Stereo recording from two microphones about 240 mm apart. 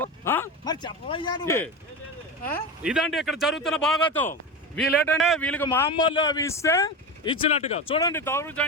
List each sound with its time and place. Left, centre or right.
0.0 s speech: centre
2.8 s a man's voice: centre
7.5 s speech: left
8.1 s a man's voice: centre